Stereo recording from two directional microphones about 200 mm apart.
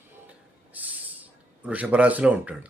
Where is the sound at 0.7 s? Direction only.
10° right (ahead or behind).